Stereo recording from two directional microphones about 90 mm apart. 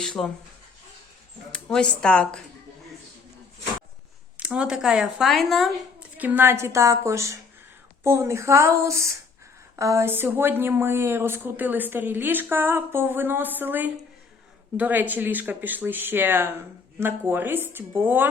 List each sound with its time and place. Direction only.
0.2 s speech: 5° left (ahead or behind)
1.5 s speech: 10° left (ahead or behind)
4.4 s speech: 10° right (ahead or behind)
6.0 s a woman's voice: 20° right (ahead or behind)